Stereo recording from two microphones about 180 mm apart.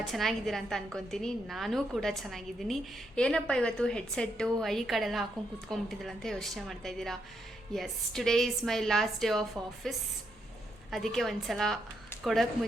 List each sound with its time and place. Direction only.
0.1 s a woman's voice: centre (ahead or behind)
10.9 s a woman's voice: centre (ahead or behind)